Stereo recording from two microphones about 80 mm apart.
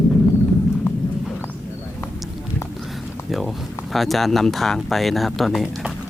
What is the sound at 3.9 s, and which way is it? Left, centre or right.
Speech, centre.